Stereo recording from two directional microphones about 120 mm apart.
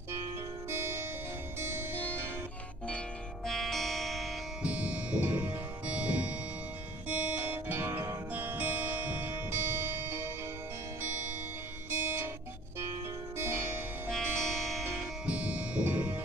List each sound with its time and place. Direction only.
0.7 s music: 20° right (ahead or behind)
3.4 s music: centre (ahead or behind)
4.6 s music: 10° right (ahead or behind)
11.9 s music: 15° right (ahead or behind)
14.1 s music: centre (ahead or behind)
15.2 s music: 10° right (ahead or behind)